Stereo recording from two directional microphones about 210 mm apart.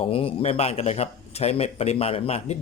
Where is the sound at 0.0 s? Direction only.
25° left (ahead or behind).